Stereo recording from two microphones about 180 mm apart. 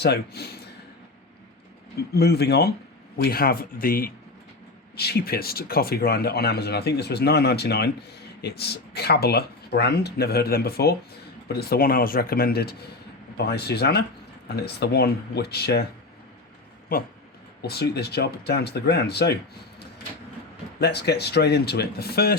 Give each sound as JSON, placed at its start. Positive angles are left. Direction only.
{"t": 0.0, "sound": "speech", "side_deg": 65}
{"t": 2.1, "sound": "speech", "side_deg": 65}
{"t": 17.6, "sound": "speech", "side_deg": 65}
{"t": 20.7, "sound": "speech", "side_deg": 65}